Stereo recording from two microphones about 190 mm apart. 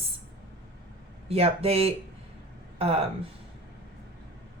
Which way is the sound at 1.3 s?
30° right (ahead or behind).